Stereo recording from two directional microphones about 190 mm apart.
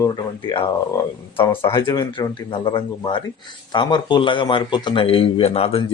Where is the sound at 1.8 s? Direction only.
20° left (ahead or behind).